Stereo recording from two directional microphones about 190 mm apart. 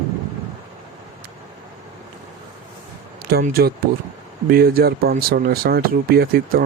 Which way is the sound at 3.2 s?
55° right (ahead or behind).